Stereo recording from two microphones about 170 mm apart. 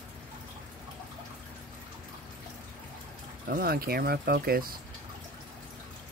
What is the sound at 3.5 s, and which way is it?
Speech, 65° right (ahead or behind).